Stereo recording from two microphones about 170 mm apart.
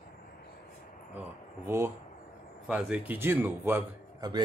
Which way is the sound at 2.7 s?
5° right (ahead or behind).